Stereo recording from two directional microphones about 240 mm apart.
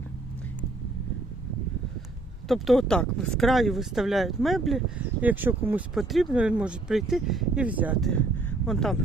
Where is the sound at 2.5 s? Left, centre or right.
Centre.